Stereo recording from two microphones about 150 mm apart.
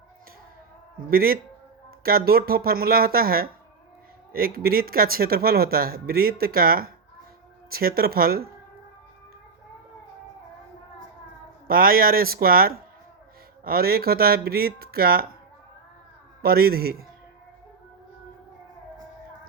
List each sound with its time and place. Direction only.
1.1 s speech: 80° right
11.7 s speech: 75° right (ahead or behind)
16.4 s speech: 90° right